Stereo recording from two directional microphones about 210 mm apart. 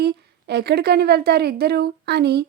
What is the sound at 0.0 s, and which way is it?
A woman's voice, 50° right (ahead or behind).